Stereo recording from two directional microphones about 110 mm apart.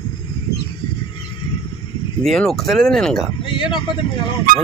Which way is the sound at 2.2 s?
5° left (ahead or behind).